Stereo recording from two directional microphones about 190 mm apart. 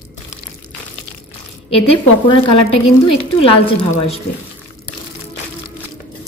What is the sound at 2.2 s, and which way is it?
A woman's voice, 30° left (ahead or behind).